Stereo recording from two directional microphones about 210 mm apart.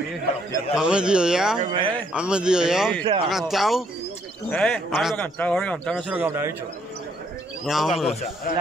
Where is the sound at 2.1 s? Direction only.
5° right (ahead or behind).